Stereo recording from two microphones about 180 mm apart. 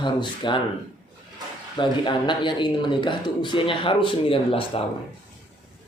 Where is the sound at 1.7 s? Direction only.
25° left (ahead or behind).